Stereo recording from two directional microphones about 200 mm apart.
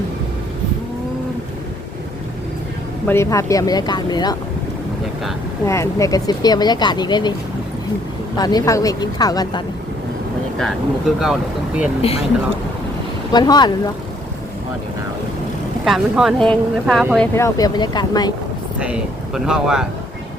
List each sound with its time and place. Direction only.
3.1 s speech: 15° left (ahead or behind)
5.6 s speech: 15° left (ahead or behind)
8.4 s speech: 20° left (ahead or behind)
10.6 s speech: centre (ahead or behind)
13.3 s speech: 20° left (ahead or behind)
15.8 s speech: centre (ahead or behind)
17.3 s speech: 15° left (ahead or behind)
18.8 s speech: 5° right (ahead or behind)